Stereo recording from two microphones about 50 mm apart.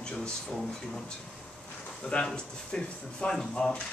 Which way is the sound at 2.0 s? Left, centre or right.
Left.